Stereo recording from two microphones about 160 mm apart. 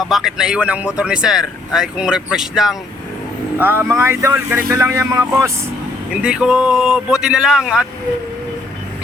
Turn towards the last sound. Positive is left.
turn(degrees=-5)  # may be behind; listen again after turning